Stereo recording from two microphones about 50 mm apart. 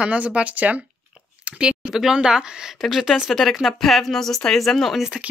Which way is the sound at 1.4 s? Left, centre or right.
Right.